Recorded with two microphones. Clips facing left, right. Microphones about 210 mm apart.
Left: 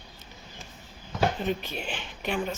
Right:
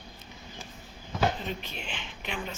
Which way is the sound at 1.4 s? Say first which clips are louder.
Left 6 dB; 45° left (ahead or behind).